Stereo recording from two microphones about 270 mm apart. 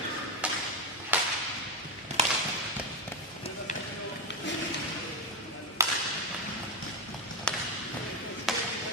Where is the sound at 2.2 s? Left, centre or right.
Right.